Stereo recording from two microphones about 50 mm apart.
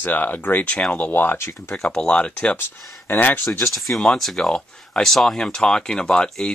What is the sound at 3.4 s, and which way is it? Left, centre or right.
Speech, left.